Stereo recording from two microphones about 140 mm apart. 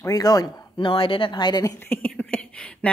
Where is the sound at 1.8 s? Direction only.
15° left (ahead or behind).